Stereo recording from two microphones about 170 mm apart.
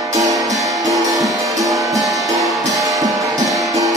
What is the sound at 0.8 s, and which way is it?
Music, 20° right (ahead or behind).